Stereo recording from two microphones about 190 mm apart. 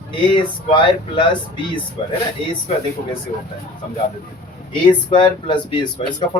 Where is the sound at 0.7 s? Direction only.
25° left (ahead or behind).